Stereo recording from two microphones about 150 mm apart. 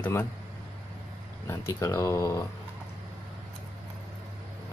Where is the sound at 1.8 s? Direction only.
20° left (ahead or behind).